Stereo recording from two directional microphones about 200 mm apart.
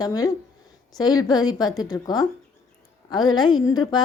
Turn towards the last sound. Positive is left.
turn(degrees=20)  # may be behind; listen again after turning